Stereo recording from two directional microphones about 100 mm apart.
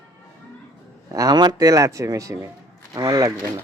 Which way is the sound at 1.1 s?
40° right (ahead or behind).